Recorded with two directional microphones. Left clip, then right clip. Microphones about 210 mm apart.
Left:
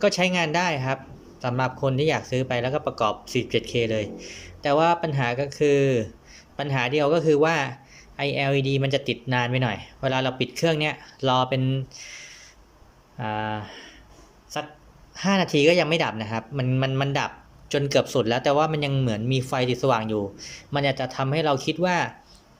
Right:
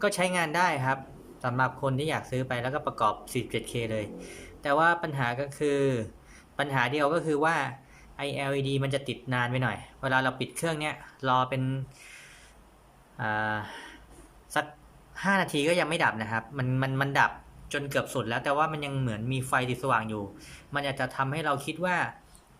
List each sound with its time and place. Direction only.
0.0 s speech: 5° left (ahead or behind)
15.1 s speech: 10° left (ahead or behind)